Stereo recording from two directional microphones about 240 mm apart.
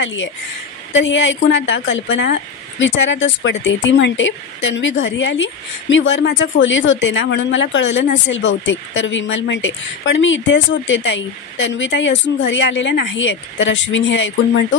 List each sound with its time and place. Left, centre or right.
0.0 s speech: left